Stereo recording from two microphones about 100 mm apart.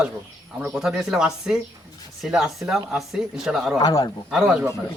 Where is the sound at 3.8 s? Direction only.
35° left (ahead or behind).